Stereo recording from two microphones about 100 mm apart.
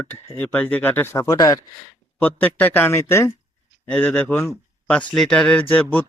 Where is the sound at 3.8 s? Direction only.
15° left (ahead or behind).